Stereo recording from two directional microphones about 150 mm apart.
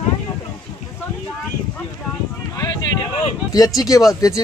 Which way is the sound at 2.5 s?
25° left (ahead or behind).